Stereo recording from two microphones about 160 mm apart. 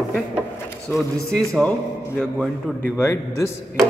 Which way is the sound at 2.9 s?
15° left (ahead or behind).